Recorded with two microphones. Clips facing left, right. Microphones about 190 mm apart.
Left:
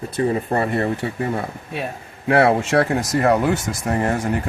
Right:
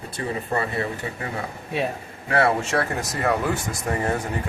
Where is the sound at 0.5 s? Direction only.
50° left (ahead or behind).